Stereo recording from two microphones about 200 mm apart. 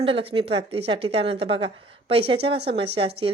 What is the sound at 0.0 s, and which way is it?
A woman's voice, 25° right (ahead or behind).